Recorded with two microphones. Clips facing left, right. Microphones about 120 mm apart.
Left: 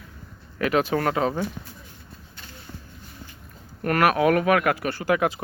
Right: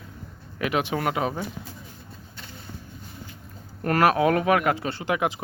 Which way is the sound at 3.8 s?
25° right (ahead or behind).